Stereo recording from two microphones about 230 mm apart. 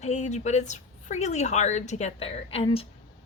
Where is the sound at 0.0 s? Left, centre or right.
Left.